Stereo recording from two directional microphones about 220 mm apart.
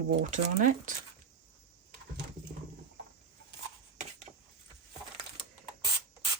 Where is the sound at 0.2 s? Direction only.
35° right (ahead or behind).